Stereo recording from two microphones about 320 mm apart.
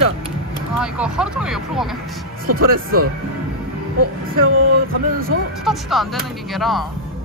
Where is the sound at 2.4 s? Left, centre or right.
Right.